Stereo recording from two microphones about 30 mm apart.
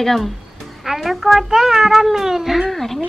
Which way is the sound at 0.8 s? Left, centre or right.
Centre.